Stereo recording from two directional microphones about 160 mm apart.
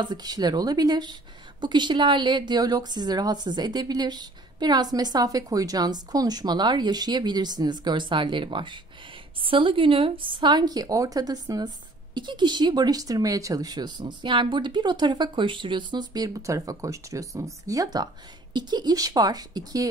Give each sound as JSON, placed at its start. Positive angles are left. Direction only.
{"t": 0.0, "sound": "a woman's voice", "side_deg": -25}